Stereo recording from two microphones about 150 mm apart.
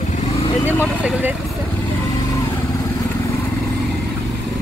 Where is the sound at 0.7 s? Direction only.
10° right (ahead or behind).